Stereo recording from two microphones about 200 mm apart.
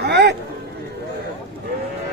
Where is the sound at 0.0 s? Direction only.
55° right (ahead or behind).